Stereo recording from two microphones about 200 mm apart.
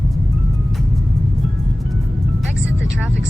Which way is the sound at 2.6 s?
65° right (ahead or behind).